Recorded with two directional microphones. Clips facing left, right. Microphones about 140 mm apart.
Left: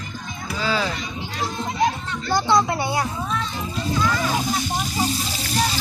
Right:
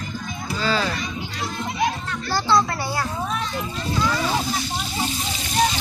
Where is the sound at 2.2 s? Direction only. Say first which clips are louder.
Left 1 dB; 20° left (ahead or behind).